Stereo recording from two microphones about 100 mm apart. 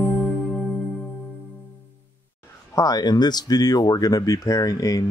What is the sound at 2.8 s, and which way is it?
Speech, 40° left (ahead or behind).